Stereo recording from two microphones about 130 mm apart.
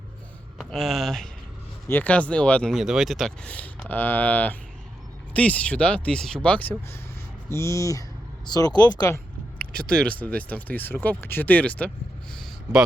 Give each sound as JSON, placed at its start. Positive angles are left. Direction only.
{"t": 0.6, "sound": "speech", "side_deg": 0}
{"t": 2.7, "sound": "speech", "side_deg": -5}
{"t": 9.6, "sound": "speech", "side_deg": 5}